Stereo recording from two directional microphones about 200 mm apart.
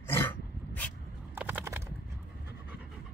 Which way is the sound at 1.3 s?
10° right (ahead or behind).